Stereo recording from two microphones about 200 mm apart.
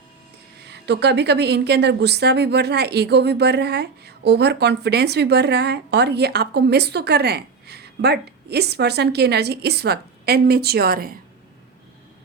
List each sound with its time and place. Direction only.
0.7 s a woman's voice: 55° right (ahead or behind)